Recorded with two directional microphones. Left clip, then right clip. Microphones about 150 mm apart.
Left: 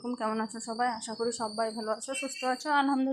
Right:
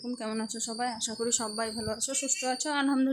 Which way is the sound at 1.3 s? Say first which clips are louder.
Left 2 dB; 25° right (ahead or behind).